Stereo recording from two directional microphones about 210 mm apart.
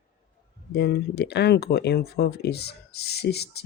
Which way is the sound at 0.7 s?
50° left (ahead or behind).